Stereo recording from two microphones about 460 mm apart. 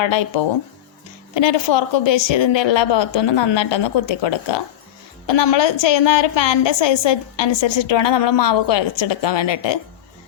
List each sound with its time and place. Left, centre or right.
0.0 s a woman's voice: left